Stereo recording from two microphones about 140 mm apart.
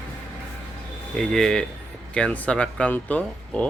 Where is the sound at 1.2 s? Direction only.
5° left (ahead or behind).